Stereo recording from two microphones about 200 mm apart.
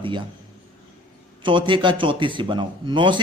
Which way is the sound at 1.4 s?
25° right (ahead or behind).